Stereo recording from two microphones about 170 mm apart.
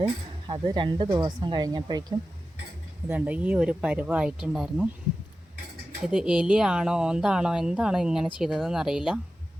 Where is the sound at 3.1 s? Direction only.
10° right (ahead or behind).